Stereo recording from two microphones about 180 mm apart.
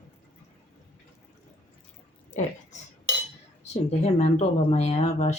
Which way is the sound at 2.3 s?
15° left (ahead or behind).